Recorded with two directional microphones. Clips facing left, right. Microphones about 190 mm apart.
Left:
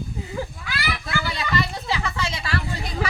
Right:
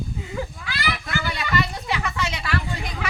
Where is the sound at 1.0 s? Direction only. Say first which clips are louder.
Even; 30° left (ahead or behind).